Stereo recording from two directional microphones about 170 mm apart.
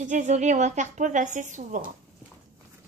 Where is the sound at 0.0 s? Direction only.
45° right (ahead or behind).